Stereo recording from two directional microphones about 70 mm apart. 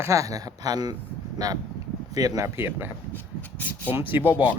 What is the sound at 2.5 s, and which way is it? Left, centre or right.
Speech, right.